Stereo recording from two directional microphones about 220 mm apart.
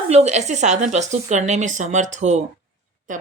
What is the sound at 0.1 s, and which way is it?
Speech, 30° right (ahead or behind).